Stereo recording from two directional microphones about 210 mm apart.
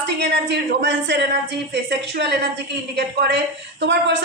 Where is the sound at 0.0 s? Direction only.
55° right (ahead or behind).